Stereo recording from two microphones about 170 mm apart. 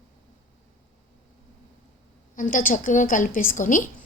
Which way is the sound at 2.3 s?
50° left (ahead or behind).